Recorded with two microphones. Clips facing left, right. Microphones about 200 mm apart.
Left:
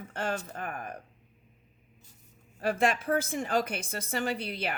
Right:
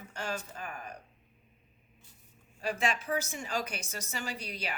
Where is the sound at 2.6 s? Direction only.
55° left (ahead or behind).